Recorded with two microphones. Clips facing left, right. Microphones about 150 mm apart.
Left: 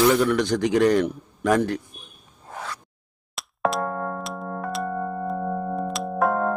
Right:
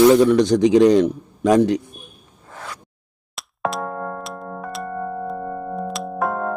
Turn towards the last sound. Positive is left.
turn(degrees=0)  # may be behind; listen again after turning